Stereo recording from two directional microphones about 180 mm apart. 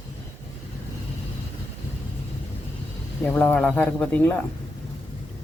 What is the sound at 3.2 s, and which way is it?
Speech, 10° left (ahead or behind).